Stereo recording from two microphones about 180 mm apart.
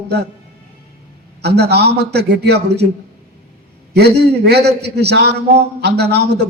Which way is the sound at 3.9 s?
65° right (ahead or behind).